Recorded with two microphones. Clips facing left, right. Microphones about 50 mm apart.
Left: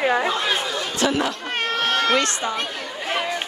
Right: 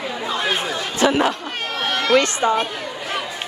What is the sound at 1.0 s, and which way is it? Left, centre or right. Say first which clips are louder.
Speech: right 5 dB; right.